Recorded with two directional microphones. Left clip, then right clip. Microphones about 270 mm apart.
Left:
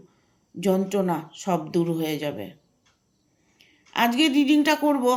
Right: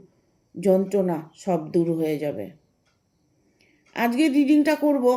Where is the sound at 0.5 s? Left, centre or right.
Centre.